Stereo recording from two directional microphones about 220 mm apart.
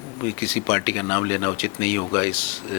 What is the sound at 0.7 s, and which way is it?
Speech, 10° left (ahead or behind).